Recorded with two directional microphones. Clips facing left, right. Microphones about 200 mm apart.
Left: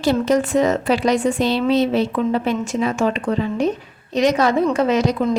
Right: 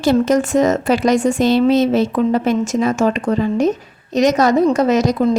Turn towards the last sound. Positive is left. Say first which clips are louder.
# right 3 dB
turn(degrees=-35)  # may be behind; listen again after turning